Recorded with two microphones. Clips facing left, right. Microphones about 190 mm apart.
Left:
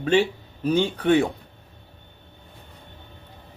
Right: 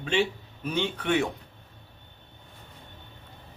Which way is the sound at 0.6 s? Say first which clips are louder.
Left 8 dB; 35° left (ahead or behind).